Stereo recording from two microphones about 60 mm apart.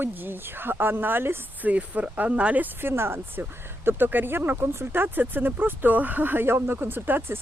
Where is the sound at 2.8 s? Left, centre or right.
Right.